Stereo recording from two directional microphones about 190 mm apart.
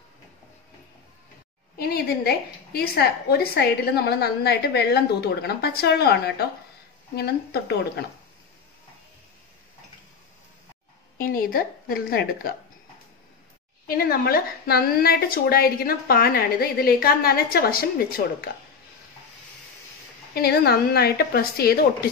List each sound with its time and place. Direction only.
1.8 s a woman's voice: 55° left (ahead or behind)
11.1 s a woman's voice: 50° left (ahead or behind)
13.8 s a woman's voice: 50° left (ahead or behind)
20.3 s a woman's voice: 55° left (ahead or behind)